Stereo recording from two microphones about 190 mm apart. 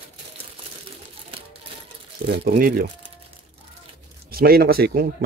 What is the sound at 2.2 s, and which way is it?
Speech, 60° right (ahead or behind).